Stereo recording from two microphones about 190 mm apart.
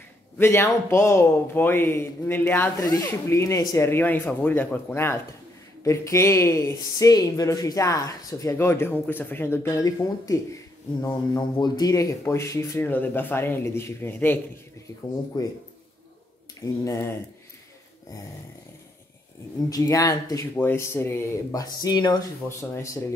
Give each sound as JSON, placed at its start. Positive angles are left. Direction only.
{"t": 0.4, "sound": "a man's voice", "side_deg": 15}
{"t": 16.6, "sound": "a man's voice", "side_deg": 15}
{"t": 19.7, "sound": "a man's voice", "side_deg": 20}